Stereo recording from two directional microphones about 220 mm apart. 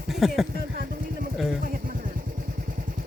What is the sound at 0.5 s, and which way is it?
Vehicle, 45° right (ahead or behind).